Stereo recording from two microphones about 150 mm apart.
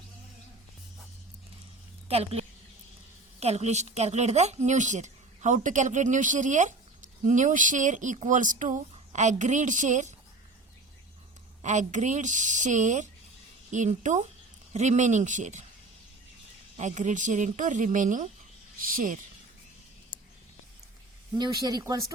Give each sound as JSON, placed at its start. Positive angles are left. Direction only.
{"t": 2.0, "sound": "a woman's voice", "side_deg": -40}
{"t": 3.4, "sound": "a woman's voice", "side_deg": -45}
{"t": 11.6, "sound": "a woman's voice", "side_deg": -50}
{"t": 16.7, "sound": "speech", "side_deg": -50}
{"t": 21.3, "sound": "speech", "side_deg": -25}